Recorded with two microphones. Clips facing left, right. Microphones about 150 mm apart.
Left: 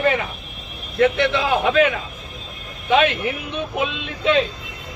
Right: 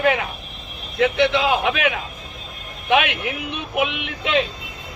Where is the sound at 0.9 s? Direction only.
15° right (ahead or behind).